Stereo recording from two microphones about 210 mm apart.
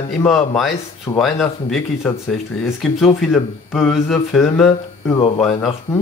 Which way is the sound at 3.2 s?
Centre (ahead or behind).